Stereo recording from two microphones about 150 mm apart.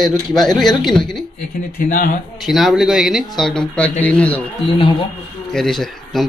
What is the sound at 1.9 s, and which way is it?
Speech, 70° left (ahead or behind).